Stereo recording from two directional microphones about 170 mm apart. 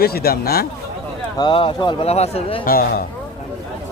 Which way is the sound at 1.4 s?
30° left (ahead or behind).